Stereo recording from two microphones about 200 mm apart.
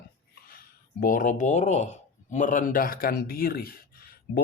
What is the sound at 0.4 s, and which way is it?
Speech, 45° left (ahead or behind).